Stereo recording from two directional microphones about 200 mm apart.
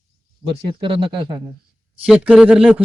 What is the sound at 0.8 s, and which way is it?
Speech, 25° right (ahead or behind).